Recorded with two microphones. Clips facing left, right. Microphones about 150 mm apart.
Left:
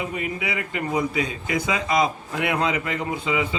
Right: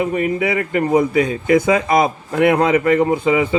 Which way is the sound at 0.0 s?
50° right (ahead or behind).